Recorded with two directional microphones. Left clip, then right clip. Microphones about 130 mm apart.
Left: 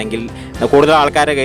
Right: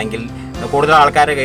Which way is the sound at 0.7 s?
70° left (ahead or behind).